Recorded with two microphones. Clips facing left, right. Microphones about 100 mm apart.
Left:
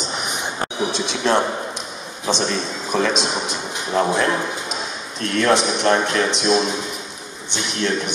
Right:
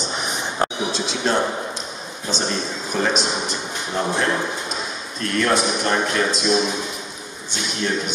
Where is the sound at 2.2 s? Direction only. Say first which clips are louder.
Left 3 dB; 90° left.